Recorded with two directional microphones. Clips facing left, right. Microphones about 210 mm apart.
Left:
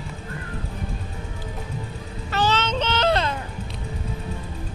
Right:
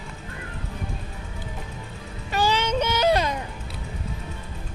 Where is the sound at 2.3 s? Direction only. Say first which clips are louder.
Even; 10° right (ahead or behind).